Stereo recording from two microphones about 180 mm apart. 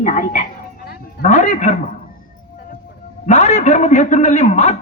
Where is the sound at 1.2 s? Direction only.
40° left (ahead or behind).